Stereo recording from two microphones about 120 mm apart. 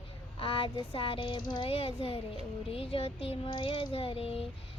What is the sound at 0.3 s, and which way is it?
Child singing, 50° left (ahead or behind).